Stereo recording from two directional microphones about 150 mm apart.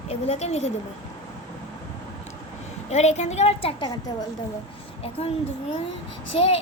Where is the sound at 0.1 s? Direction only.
45° left (ahead or behind).